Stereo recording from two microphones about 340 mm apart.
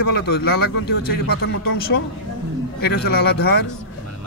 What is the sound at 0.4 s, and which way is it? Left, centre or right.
Speech, left.